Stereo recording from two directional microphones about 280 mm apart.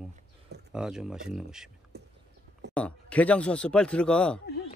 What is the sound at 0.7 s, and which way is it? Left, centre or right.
Speech, centre.